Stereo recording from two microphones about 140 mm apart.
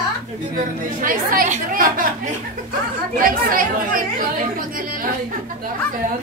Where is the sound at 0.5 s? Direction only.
90° right.